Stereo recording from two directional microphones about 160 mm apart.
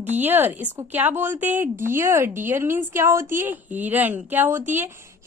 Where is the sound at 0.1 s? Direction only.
10° right (ahead or behind).